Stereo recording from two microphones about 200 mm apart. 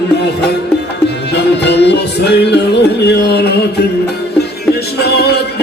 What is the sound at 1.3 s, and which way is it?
Music, 55° left (ahead or behind).